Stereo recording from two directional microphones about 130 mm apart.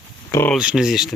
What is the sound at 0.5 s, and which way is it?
Speech, 5° right (ahead or behind).